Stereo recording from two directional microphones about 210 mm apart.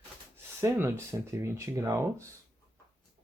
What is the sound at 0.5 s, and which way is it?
Speech, 10° right (ahead or behind).